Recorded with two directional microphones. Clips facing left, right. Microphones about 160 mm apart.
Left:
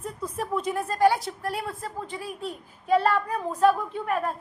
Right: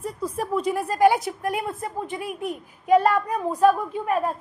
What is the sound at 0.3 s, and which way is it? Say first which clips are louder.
A woman's voice: right 3 dB; 5° right (ahead or behind).